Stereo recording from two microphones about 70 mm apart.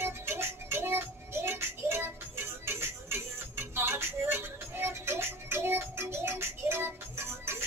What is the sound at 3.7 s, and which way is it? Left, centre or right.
Music, right.